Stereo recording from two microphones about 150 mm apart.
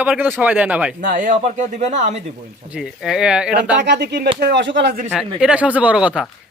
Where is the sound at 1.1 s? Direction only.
60° right (ahead or behind).